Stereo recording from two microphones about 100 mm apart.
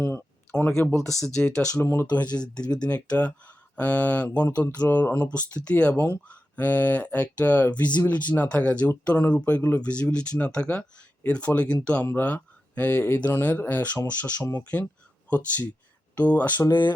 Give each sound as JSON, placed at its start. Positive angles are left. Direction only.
{"t": 0.0, "sound": "a sound", "side_deg": 25}
{"t": 0.5, "sound": "speech", "side_deg": 10}
{"t": 1.8, "sound": "speech", "side_deg": 20}
{"t": 2.3, "sound": "speech", "side_deg": 10}
{"t": 6.0, "sound": "speech", "side_deg": 25}